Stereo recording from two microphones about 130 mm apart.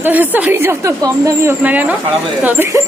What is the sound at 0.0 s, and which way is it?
A woman's voice, 15° right (ahead or behind).